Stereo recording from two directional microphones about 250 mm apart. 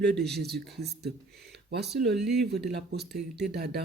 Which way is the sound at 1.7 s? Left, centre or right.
Right.